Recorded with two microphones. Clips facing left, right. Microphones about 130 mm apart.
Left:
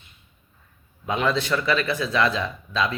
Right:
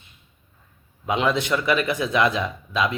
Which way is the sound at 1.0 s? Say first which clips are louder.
Right 1 dB; 15° right (ahead or behind).